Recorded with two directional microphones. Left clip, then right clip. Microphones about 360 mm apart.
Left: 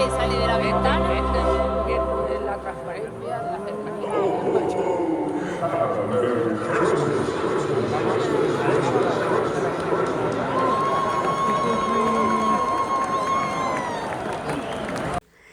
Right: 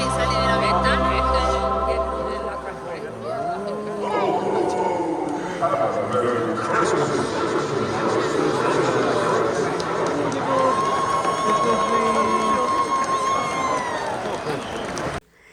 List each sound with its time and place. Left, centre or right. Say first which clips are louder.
0.0 s music: right 1 dB; centre
11.0 s a sound: right 1 dB; right
13.1 s run: right 1 dB; right